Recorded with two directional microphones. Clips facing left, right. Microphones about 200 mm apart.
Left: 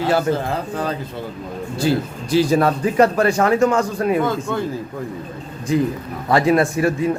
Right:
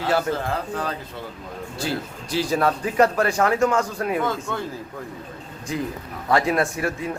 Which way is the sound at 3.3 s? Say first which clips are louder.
Left 4 dB; 20° left (ahead or behind).